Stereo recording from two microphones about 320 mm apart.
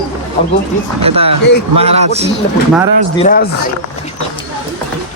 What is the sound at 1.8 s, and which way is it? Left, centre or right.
Speech, centre.